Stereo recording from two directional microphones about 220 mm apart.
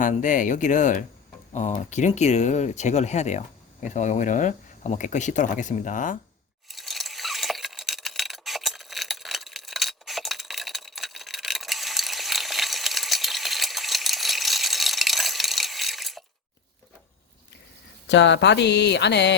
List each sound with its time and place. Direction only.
0.0 s speech: 35° left (ahead or behind)
6.7 s a sound: centre (ahead or behind)
18.1 s speech: 55° left (ahead or behind)